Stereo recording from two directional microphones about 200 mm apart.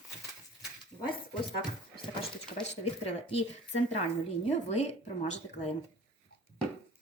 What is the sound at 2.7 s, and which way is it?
Speech, 30° left (ahead or behind).